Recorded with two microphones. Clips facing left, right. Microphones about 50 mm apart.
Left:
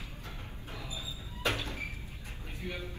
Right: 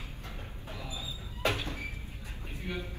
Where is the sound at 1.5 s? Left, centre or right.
Right.